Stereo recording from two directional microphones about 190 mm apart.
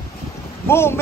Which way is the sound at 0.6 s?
15° left (ahead or behind).